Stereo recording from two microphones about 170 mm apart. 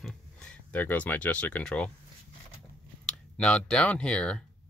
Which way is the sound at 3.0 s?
5° left (ahead or behind).